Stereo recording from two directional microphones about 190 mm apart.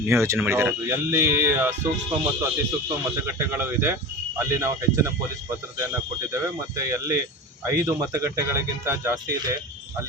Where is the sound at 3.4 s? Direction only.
10° right (ahead or behind).